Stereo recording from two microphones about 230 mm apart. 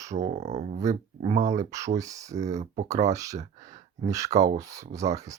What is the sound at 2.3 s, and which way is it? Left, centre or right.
Speech, right.